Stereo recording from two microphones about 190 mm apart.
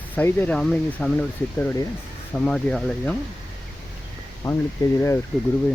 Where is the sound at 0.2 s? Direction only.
10° left (ahead or behind).